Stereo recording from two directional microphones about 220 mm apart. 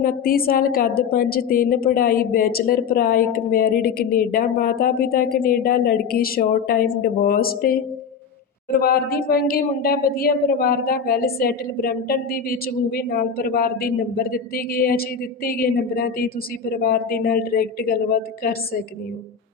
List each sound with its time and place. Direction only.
0.0 s a woman's voice: 40° left (ahead or behind)
8.8 s a woman's voice: 45° left (ahead or behind)